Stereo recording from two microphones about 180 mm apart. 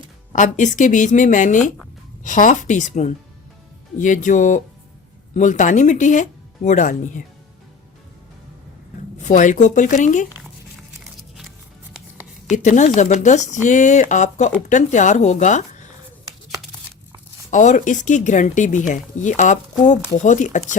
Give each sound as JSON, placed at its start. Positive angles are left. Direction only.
{"t": 0.3, "sound": "speech", "side_deg": 45}
{"t": 9.2, "sound": "speech", "side_deg": 45}
{"t": 12.6, "sound": "speech", "side_deg": 40}
{"t": 17.5, "sound": "speech", "side_deg": 45}